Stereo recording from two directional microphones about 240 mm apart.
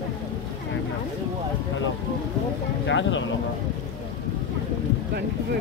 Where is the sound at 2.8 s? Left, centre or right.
Left.